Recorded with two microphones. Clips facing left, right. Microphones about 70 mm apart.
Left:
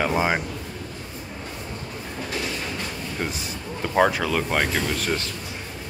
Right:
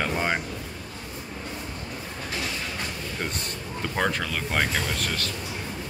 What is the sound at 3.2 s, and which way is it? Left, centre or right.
Speech, centre.